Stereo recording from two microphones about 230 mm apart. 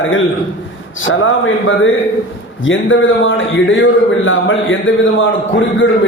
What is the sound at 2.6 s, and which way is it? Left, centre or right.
A man's voice, left.